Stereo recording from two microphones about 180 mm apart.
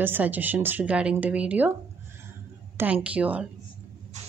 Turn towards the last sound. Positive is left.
turn(degrees=-10)  # may be behind; listen again after turning